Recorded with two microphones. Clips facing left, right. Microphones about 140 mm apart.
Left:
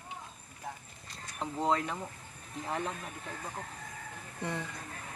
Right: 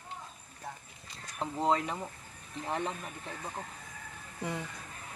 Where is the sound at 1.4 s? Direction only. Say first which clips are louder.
Right 1 dB; centre (ahead or behind).